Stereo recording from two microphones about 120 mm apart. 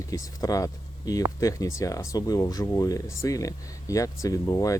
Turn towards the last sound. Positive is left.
turn(degrees=30)  # may be behind; listen again after turning